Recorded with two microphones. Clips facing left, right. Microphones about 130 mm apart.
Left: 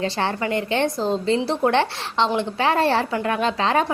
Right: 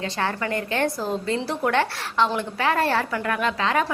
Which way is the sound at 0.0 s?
30° left (ahead or behind).